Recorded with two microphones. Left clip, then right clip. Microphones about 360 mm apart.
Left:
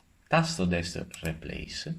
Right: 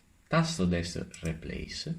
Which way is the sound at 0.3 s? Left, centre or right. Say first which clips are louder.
Left 3 dB; left.